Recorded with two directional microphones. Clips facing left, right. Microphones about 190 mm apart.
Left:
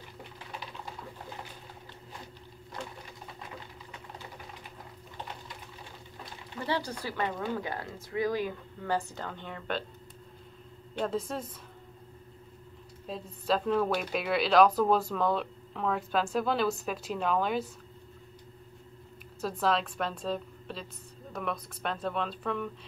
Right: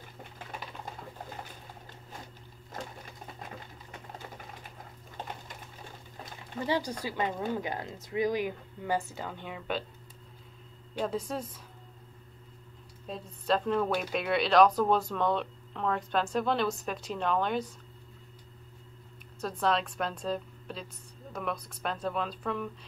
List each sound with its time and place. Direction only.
6.6 s speech: 10° right (ahead or behind)
11.0 s a woman's voice: centre (ahead or behind)
13.0 s a woman's voice: centre (ahead or behind)
19.4 s a woman's voice: centre (ahead or behind)